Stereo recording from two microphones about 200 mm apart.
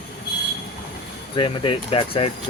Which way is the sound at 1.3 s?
25° left (ahead or behind).